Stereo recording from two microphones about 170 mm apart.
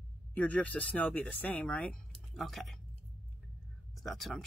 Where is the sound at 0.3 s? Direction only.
10° left (ahead or behind).